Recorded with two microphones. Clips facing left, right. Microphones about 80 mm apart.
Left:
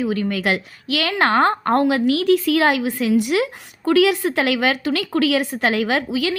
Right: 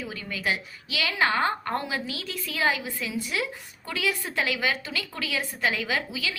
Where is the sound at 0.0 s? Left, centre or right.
Left.